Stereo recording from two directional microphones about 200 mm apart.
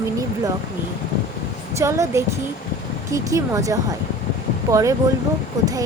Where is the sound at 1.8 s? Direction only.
15° right (ahead or behind).